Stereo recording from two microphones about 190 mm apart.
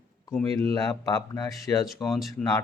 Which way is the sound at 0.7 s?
20° left (ahead or behind).